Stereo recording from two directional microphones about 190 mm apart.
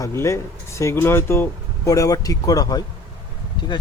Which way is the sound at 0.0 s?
15° left (ahead or behind).